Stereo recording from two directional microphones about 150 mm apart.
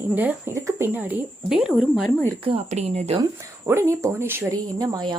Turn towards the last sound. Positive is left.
turn(degrees=-25)  # may be behind; listen again after turning